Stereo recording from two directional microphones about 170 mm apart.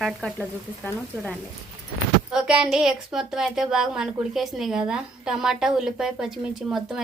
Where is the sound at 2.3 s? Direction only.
5° right (ahead or behind).